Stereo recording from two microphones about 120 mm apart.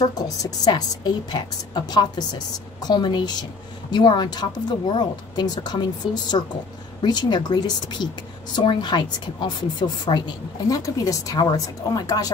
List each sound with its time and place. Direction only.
0.0 s a woman's voice: 35° left (ahead or behind)